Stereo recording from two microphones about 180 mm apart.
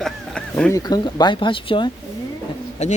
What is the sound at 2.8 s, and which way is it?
Speech, 40° left (ahead or behind).